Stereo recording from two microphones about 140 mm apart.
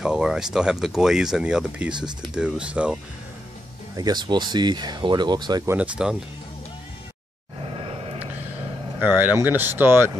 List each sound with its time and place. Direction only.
0.0 s speech: 5° right (ahead or behind)
3.9 s speech: 30° right (ahead or behind)
5.7 s speech: 5° right (ahead or behind)
7.6 s vehicle: 40° right (ahead or behind)
9.0 s speech: 15° right (ahead or behind)